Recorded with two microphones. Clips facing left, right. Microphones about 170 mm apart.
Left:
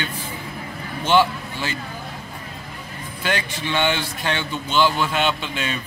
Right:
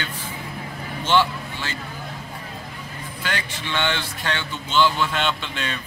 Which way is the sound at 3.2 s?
15° left (ahead or behind).